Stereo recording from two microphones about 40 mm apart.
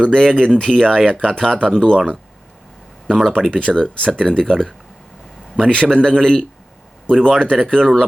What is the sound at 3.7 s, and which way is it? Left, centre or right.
Speech, left.